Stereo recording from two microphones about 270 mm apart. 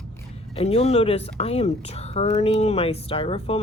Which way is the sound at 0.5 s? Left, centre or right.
Left.